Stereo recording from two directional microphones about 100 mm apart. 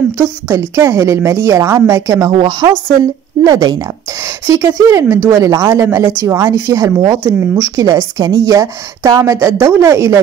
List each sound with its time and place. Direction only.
0.2 s a woman's voice: 30° right (ahead or behind)
2.3 s a woman's voice: 50° right (ahead or behind); by 10.2 s 30° right (ahead or behind)